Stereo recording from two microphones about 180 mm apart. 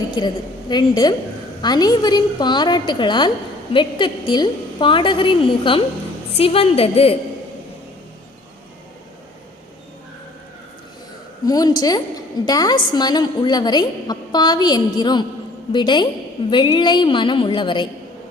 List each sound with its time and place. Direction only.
0.2 s a woman's voice: 25° left (ahead or behind)
11.4 s a woman's voice: 20° left (ahead or behind)